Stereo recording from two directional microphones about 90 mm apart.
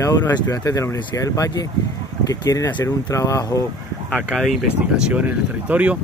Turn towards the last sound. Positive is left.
turn(degrees=-15)  # may be behind; listen again after turning